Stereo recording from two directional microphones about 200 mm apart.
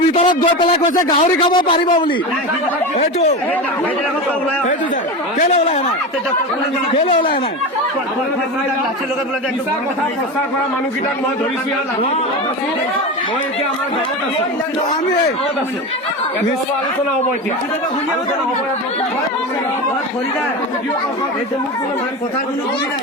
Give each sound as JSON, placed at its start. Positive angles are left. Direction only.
{"t": 0.1, "sound": "speech", "side_deg": 30}
{"t": 0.9, "sound": "a man's voice", "side_deg": 40}
{"t": 1.4, "sound": "a man's voice", "side_deg": 25}
{"t": 7.0, "sound": "a man's voice", "side_deg": 30}